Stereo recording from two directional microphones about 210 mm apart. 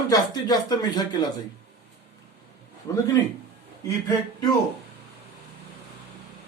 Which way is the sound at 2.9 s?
15° left (ahead or behind).